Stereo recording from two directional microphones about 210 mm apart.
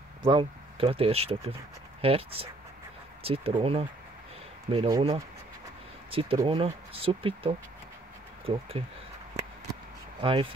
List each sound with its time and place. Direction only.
0.2 s speech: 25° right (ahead or behind)
10.2 s speech: 25° right (ahead or behind)